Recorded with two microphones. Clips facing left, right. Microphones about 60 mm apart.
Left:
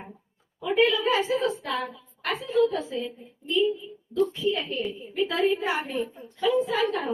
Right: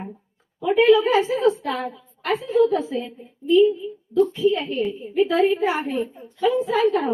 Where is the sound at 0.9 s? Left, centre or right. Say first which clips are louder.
Right 5 dB; right.